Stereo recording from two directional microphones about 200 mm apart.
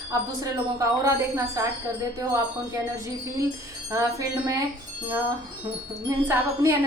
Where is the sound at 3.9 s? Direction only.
15° right (ahead or behind).